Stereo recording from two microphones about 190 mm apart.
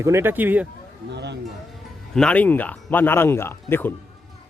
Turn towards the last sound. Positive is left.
turn(degrees=10)  # may be behind; listen again after turning